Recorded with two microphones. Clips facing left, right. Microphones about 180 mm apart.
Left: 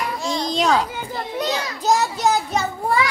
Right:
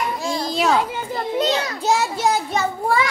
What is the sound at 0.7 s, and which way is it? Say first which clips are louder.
Speech: right 1 dB; 25° right (ahead or behind).